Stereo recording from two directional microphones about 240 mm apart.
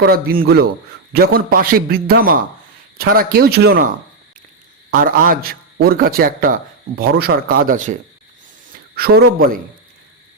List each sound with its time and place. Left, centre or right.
0.0 s a man's voice: right
9.0 s a man's voice: right